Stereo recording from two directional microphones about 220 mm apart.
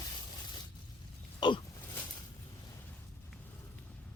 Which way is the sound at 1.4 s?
20° left (ahead or behind).